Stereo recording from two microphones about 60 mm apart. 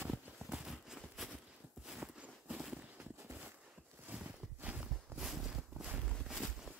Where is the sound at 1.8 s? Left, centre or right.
Centre.